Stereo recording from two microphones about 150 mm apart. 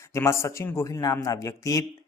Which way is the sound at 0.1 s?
20° left (ahead or behind).